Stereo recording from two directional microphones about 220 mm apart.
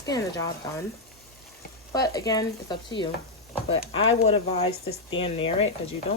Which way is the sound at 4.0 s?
65° left (ahead or behind).